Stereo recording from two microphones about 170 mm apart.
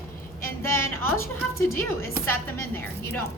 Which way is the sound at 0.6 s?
15° left (ahead or behind).